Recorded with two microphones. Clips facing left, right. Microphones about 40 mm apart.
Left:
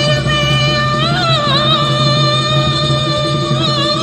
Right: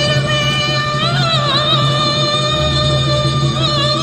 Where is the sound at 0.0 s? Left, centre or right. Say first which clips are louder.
Left 1 dB; centre.